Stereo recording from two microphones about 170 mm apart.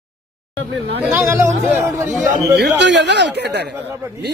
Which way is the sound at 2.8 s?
90° right.